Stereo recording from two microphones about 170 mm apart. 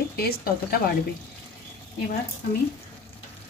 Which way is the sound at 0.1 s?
65° left (ahead or behind).